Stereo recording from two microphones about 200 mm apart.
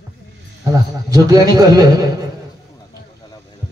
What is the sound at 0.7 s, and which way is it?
A man's voice, 15° right (ahead or behind).